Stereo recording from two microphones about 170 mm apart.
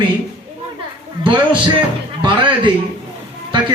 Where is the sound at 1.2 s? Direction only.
30° right (ahead or behind).